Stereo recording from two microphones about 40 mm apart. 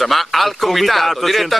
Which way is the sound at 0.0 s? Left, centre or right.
Centre.